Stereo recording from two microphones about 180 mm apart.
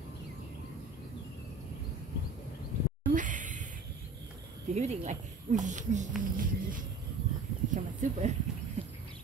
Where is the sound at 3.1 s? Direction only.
45° right (ahead or behind).